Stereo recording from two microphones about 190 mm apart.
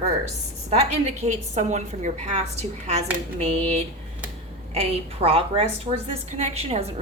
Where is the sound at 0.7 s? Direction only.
35° right (ahead or behind).